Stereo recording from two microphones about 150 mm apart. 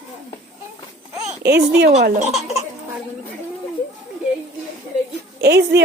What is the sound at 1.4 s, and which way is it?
Speech, 90° right.